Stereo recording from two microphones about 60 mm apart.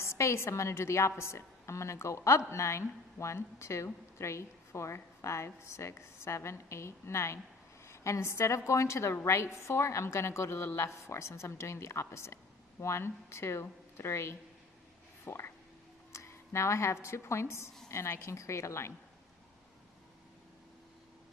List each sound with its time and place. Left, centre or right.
0.0 s speech: left
10.6 s speech: left
15.2 s a sound: left
16.1 s a woman's voice: left